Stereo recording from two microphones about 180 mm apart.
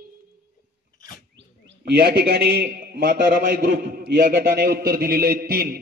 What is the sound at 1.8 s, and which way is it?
A man's voice, 60° right (ahead or behind).